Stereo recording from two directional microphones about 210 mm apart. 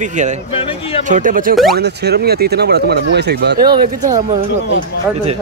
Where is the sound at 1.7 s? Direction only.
50° right (ahead or behind).